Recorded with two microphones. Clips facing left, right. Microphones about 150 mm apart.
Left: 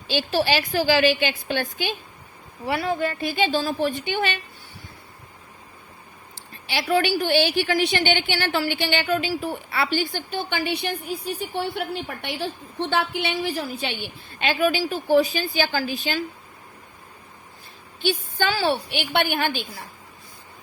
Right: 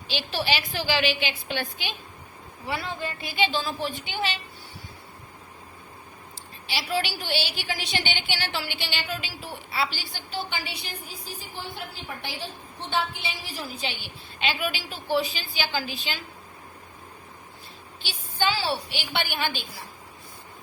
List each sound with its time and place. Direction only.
0.1 s a woman's voice: 45° left (ahead or behind)
3.2 s a woman's voice: 45° left (ahead or behind)
6.7 s a woman's voice: 55° left (ahead or behind)
18.0 s a woman's voice: 50° left (ahead or behind)